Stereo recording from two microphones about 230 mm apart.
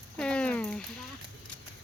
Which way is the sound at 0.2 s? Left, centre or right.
Centre.